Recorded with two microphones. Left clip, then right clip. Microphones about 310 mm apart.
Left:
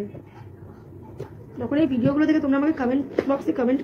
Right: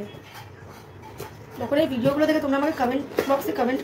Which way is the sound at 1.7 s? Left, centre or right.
Centre.